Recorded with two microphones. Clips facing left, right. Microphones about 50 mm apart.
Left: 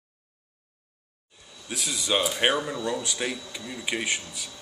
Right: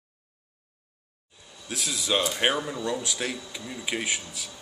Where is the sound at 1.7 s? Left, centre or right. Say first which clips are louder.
Even; centre.